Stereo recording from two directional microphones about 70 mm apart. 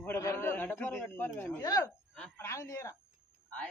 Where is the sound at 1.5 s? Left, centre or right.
Left.